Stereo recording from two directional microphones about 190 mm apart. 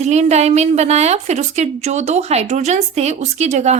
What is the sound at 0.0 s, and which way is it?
A woman's voice, 35° right (ahead or behind).